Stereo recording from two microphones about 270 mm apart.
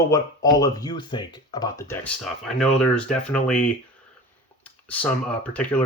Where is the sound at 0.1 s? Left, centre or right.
Centre.